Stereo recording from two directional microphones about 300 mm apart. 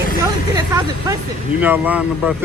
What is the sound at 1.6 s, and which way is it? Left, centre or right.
Speech, centre.